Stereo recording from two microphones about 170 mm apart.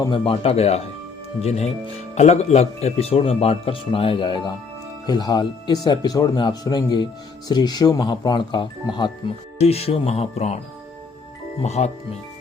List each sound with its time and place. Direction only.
0.0 s speech: 30° left (ahead or behind)
9.6 s speech: 35° left (ahead or behind)
11.6 s speech: 40° left (ahead or behind)